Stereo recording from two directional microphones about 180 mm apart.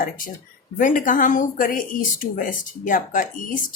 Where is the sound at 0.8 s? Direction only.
50° left (ahead or behind).